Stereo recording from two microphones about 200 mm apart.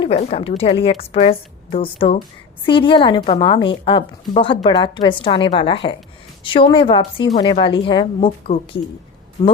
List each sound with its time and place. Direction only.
0.0 s a woman's voice: 35° left (ahead or behind)